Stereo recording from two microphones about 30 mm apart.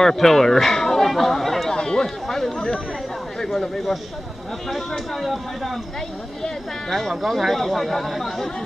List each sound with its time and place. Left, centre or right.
0.0 s speech: centre
1.7 s a sound: left
2.2 s speech: centre
2.5 s speech: left
4.9 s speech: centre
6.9 s speech: centre